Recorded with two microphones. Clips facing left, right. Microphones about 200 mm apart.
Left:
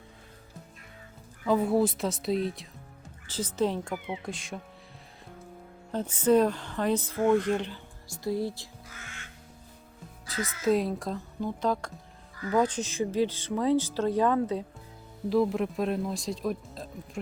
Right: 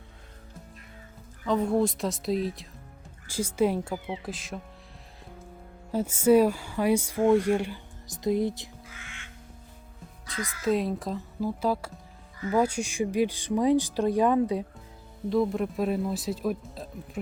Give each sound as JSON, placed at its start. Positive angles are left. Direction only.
{"t": 1.5, "sound": "speech", "side_deg": 5}
{"t": 3.2, "sound": "speech", "side_deg": -10}
{"t": 5.9, "sound": "speech", "side_deg": -10}
{"t": 10.3, "sound": "speech", "side_deg": 20}
{"t": 10.6, "sound": "speech", "side_deg": 0}
{"t": 15.3, "sound": "speech", "side_deg": 0}